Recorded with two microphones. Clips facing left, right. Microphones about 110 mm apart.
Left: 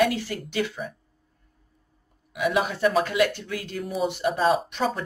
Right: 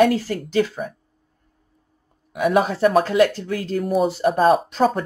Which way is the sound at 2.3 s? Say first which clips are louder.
Right 6 dB; 40° right (ahead or behind).